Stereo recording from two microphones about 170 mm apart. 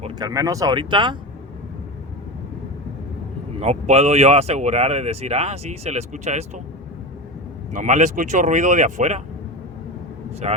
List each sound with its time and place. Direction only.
0.2 s speech: 20° right (ahead or behind)
3.6 s speech: 40° right (ahead or behind)
7.7 s speech: 45° right (ahead or behind)
10.4 s speech: 40° right (ahead or behind)